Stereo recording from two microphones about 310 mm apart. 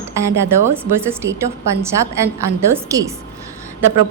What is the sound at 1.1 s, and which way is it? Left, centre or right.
Speech, centre.